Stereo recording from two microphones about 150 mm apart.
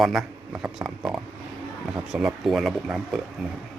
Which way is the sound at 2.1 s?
Centre (ahead or behind).